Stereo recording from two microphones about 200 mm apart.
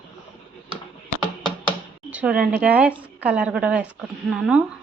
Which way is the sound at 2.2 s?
5° right (ahead or behind).